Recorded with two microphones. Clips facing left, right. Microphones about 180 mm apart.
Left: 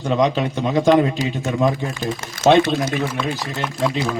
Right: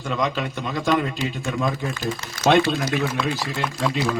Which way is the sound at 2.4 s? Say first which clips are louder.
Left 4 dB; 20° left (ahead or behind).